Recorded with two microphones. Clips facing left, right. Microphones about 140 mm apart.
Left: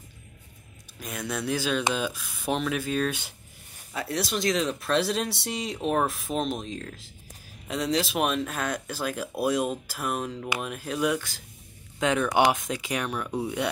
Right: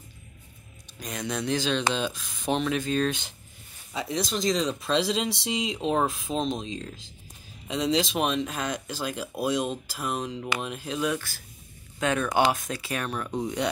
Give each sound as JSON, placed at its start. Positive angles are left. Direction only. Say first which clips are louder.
{"t": 0.9, "sound": "speech", "louder": "right 1 dB", "side_deg": 5}